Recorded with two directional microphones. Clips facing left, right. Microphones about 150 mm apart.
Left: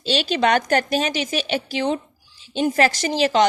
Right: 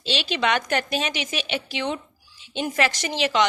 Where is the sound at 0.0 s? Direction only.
40° left (ahead or behind).